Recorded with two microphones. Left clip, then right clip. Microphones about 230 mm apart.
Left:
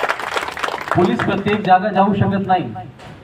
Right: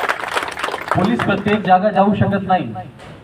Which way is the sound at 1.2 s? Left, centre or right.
Right.